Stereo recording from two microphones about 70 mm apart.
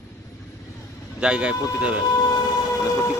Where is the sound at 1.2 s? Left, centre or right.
Centre.